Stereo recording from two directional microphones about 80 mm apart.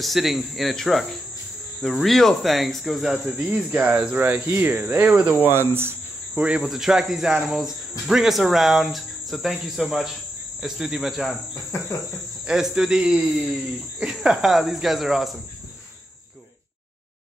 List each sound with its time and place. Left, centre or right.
0.0 s speech: centre
4.2 s speech: right
5.5 s speech: right
6.3 s speech: centre
6.6 s speech: centre
12.4 s speech: centre